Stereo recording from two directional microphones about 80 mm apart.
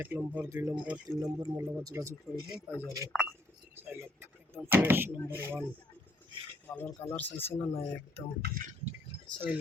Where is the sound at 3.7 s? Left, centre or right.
Right.